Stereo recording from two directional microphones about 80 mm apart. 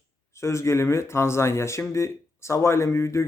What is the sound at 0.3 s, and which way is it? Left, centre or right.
Speech, left.